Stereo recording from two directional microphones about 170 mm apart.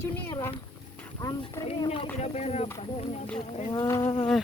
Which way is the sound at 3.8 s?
20° left (ahead or behind).